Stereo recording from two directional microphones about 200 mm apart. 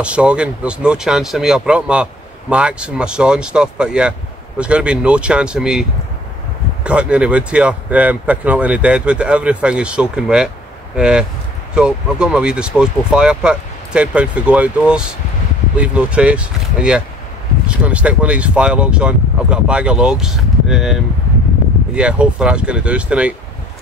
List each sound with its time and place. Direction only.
0.0 s speech: 5° right (ahead or behind)